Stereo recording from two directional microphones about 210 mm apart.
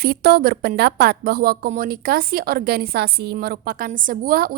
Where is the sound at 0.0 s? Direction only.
45° right (ahead or behind).